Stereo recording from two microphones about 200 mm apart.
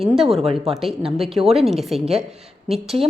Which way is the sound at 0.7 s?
Centre (ahead or behind).